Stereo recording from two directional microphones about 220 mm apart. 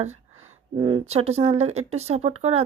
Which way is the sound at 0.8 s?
25° right (ahead or behind).